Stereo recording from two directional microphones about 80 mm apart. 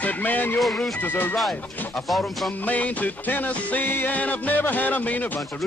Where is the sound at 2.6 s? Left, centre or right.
Centre.